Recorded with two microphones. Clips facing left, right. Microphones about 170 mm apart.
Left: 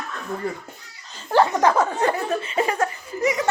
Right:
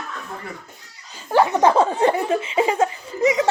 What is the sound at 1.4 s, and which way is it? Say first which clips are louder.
A woman's voice: right 3 dB; 20° right (ahead or behind).